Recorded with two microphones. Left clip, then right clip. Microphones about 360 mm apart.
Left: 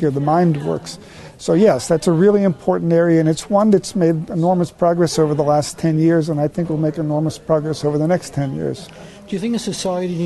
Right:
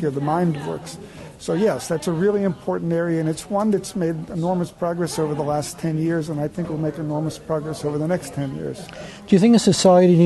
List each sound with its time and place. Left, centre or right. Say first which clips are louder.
0.0 s speech: left 6 dB; left
9.3 s speech: right 7 dB; right